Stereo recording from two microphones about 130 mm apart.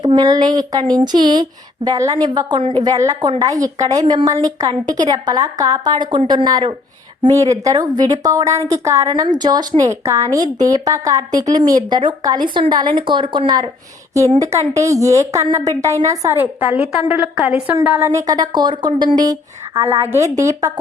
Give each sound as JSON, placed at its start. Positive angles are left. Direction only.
{"t": 0.0, "sound": "a woman's voice", "side_deg": -30}
{"t": 14.1, "sound": "a woman's voice", "side_deg": -25}
{"t": 16.7, "sound": "a woman's voice", "side_deg": 55}
{"t": 17.1, "sound": "a woman's voice", "side_deg": -10}